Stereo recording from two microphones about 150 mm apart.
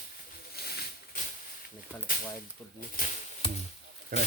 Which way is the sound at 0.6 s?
90° left.